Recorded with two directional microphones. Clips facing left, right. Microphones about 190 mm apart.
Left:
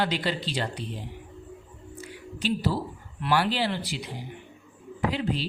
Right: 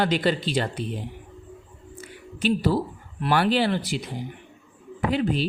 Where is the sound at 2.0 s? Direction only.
50° right (ahead or behind).